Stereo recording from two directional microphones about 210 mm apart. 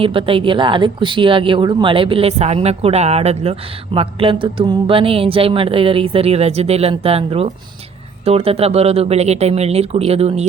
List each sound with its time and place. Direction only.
0.0 s speech: 25° right (ahead or behind)